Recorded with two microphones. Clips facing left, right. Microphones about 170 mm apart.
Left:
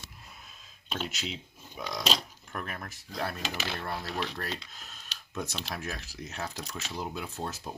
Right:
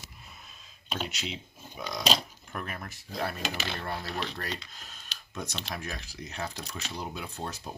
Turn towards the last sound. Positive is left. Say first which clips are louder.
# left 1 dB
turn(degrees=0)  # may be behind; listen again after turning